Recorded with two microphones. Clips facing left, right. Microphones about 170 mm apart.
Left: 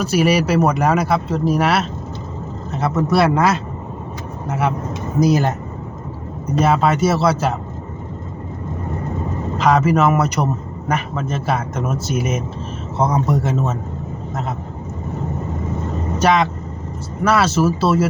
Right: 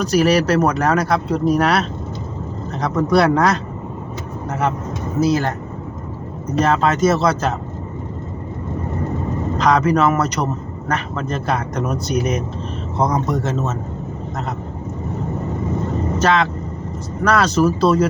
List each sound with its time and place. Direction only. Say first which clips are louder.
0.0 s a man's voice: right 1 dB; 5° left (ahead or behind)
6.6 s speech: even; 10° left (ahead or behind)
9.6 s a man's voice: left 1 dB; 5° left (ahead or behind)
16.1 s a man's voice: left 2 dB; 10° left (ahead or behind)